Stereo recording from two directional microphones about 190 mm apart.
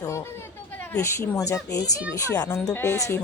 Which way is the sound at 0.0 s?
15° left (ahead or behind).